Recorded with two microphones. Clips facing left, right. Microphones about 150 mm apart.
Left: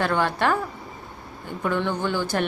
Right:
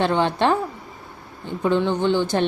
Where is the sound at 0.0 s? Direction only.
25° right (ahead or behind).